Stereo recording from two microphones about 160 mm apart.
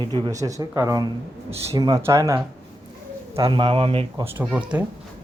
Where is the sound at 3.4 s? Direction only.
30° right (ahead or behind).